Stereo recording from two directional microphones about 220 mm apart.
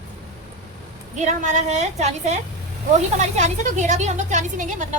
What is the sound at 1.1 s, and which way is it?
Speech, 35° right (ahead or behind).